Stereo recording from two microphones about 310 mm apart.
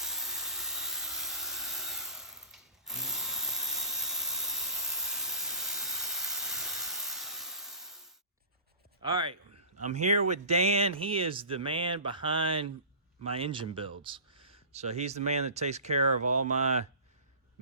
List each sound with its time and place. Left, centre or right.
0.0 s dental drill: centre
9.0 s a man's voice: centre